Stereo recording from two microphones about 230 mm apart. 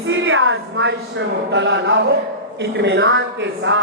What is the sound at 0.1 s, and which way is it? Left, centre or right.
A woman's voice, right.